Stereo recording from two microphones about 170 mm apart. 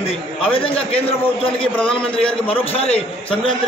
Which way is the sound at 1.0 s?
30° left (ahead or behind).